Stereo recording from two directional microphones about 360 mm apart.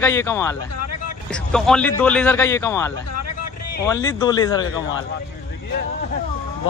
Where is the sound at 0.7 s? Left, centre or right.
Left.